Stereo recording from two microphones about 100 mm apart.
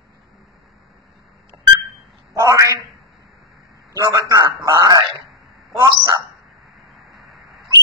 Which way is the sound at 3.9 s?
35° right (ahead or behind).